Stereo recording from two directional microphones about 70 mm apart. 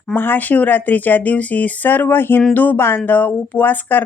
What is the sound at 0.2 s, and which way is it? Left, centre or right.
Speech, left.